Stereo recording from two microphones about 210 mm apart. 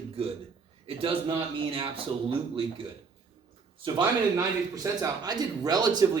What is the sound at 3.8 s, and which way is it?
A man's voice, 20° right (ahead or behind).